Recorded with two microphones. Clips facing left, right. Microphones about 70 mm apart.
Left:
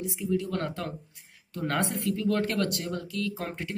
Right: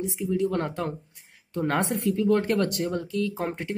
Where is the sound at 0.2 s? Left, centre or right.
Right.